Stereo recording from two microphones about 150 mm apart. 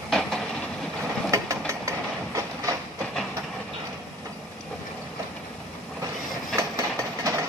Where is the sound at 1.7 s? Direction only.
20° right (ahead or behind).